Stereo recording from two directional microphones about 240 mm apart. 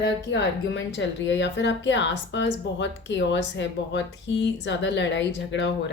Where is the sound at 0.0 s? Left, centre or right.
Left.